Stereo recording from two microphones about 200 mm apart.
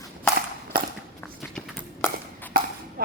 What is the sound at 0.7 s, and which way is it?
Walk, 45° right (ahead or behind).